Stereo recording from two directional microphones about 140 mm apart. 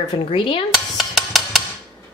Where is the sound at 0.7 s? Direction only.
Centre (ahead or behind).